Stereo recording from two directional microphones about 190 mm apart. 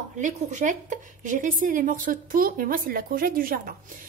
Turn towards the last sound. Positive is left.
turn(degrees=-50)  # may be behind; listen again after turning